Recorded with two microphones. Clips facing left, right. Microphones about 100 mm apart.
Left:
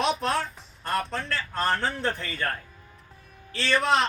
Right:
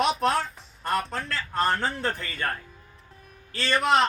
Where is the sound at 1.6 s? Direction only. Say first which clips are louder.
Right 1 dB; 5° right (ahead or behind).